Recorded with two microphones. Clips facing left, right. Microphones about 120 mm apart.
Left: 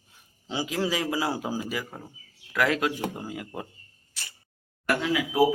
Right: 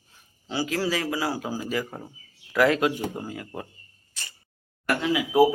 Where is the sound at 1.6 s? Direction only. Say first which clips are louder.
Right 3 dB; 10° left (ahead or behind).